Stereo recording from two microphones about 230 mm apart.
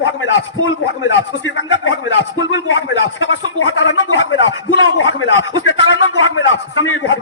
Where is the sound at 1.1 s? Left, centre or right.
Left.